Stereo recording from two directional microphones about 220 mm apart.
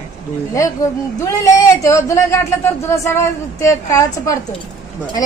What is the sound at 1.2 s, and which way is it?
A woman's voice, 15° left (ahead or behind).